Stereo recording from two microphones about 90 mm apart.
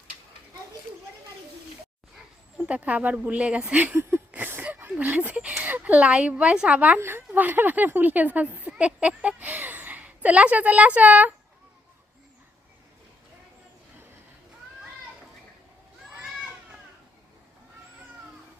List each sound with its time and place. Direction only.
2.6 s speech: 15° right (ahead or behind)